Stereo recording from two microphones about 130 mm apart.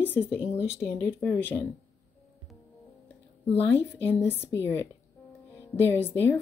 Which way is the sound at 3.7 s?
15° left (ahead or behind).